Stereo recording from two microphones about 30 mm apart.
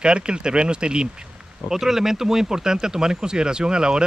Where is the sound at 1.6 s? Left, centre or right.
Centre.